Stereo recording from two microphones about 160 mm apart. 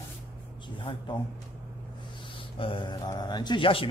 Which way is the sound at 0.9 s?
35° left (ahead or behind).